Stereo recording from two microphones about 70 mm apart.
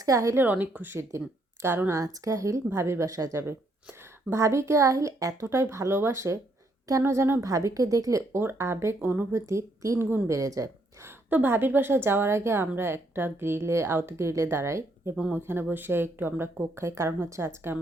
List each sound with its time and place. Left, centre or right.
0.0 s speech: right
0.5 s speech: right
1.9 s speech: right
2.6 s a woman's voice: right
3.1 s a woman's voice: right
7.4 s a woman's voice: right
11.0 s a woman's voice: right
15.1 s speech: centre
15.4 s a woman's voice: right